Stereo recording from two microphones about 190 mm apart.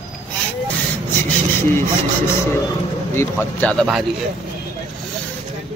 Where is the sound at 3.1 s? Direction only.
15° left (ahead or behind).